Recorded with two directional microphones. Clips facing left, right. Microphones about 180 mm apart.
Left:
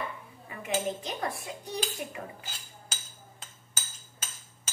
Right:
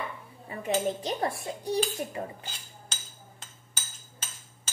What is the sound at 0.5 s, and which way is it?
Dishes, 35° right (ahead or behind).